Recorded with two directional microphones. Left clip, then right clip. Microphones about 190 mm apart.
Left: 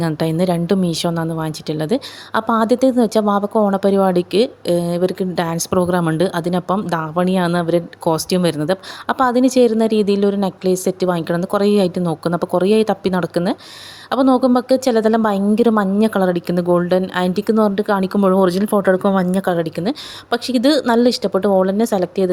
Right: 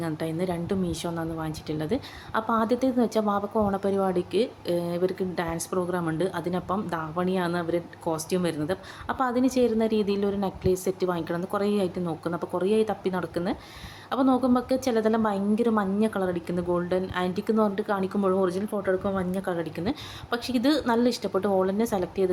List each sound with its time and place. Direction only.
0.0 s a woman's voice: 50° left (ahead or behind)